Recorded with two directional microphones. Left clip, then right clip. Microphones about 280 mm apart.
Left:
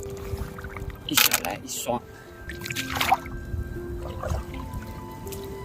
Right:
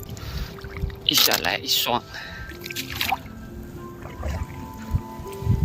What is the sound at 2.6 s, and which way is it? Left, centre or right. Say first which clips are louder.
Music: left 2 dB; centre.